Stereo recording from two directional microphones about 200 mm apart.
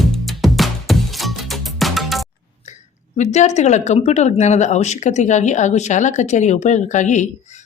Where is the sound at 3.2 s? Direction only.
35° left (ahead or behind).